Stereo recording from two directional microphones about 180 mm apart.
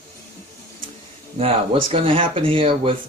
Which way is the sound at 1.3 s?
30° right (ahead or behind).